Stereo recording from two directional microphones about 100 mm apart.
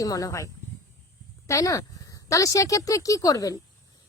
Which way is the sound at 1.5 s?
30° left (ahead or behind).